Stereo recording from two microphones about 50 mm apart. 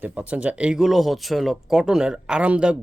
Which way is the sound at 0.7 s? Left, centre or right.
Centre.